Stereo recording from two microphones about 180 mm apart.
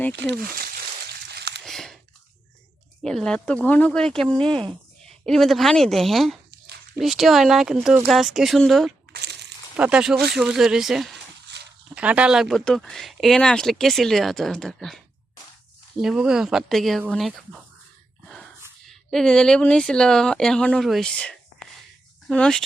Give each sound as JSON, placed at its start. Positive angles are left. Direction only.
{"t": 0.3, "sound": "speech", "side_deg": -55}
{"t": 1.3, "sound": "a sound", "side_deg": -70}
{"t": 1.6, "sound": "chewing", "side_deg": 0}
{"t": 3.0, "sound": "speech", "side_deg": 5}
{"t": 11.5, "sound": "a sound", "side_deg": -70}
{"t": 11.9, "sound": "speech", "side_deg": -5}
{"t": 18.9, "sound": "speech", "side_deg": 5}